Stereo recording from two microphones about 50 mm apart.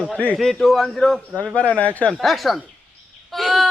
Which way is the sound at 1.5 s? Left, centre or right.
Left.